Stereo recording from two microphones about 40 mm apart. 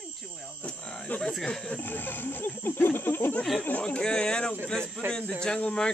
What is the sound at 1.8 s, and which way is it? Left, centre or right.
Wild animals, left.